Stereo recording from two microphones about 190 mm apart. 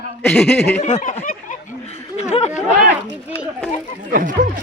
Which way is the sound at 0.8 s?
40° left (ahead or behind).